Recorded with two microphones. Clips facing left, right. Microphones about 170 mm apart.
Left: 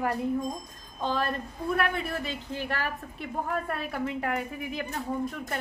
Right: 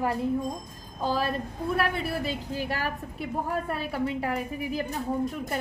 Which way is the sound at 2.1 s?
35° right (ahead or behind).